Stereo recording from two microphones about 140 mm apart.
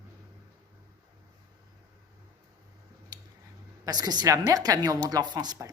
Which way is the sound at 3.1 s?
30° right (ahead or behind).